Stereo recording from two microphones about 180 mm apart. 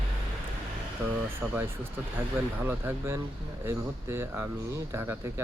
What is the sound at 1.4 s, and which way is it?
Speech, 5° right (ahead or behind).